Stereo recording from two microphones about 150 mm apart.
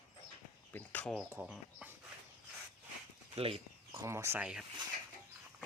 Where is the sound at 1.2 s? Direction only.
15° right (ahead or behind).